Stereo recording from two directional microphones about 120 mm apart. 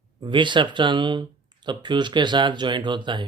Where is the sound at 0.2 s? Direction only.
40° right (ahead or behind).